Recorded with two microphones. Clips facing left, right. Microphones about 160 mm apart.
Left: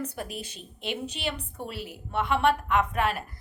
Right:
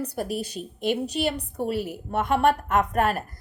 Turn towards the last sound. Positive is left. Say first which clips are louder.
# right 3 dB
turn(degrees=-45)  # may be behind; listen again after turning